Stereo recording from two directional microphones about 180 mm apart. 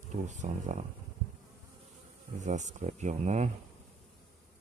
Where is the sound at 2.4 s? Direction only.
40° right (ahead or behind).